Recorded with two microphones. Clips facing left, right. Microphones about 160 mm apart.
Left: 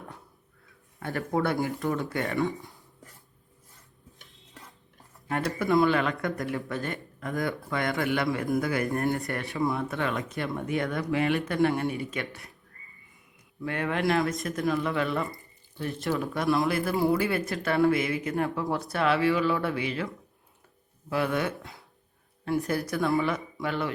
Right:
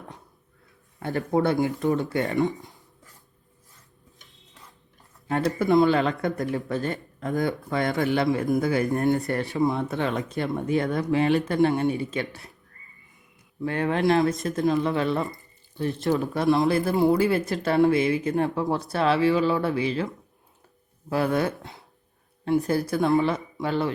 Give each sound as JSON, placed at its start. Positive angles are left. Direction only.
{"t": 0.9, "sound": "speech", "side_deg": -20}
{"t": 5.3, "sound": "speech", "side_deg": -25}
{"t": 13.7, "sound": "speech", "side_deg": -30}
{"t": 16.2, "sound": "speech", "side_deg": -35}
{"t": 21.1, "sound": "speech", "side_deg": -35}
{"t": 22.4, "sound": "speech", "side_deg": -25}